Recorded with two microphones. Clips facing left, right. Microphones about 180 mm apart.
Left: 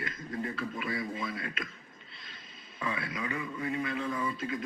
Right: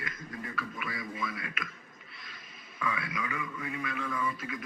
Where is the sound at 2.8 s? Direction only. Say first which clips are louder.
Even; 30° left (ahead or behind).